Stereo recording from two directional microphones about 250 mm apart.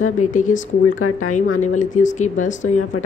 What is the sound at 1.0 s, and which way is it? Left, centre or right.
Speech, left.